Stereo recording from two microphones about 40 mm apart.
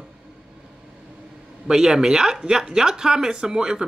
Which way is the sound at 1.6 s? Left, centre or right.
Centre.